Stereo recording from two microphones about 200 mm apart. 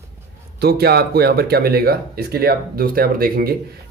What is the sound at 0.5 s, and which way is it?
Speech, 50° right (ahead or behind).